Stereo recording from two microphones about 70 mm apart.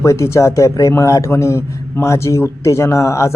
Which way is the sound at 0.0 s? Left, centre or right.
Left.